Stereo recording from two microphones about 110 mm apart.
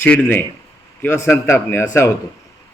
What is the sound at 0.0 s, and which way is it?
A man's voice, 15° left (ahead or behind).